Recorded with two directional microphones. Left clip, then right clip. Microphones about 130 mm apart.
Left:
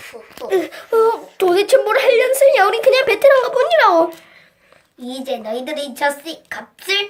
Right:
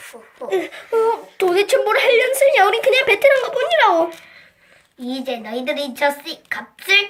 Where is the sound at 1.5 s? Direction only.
25° left (ahead or behind).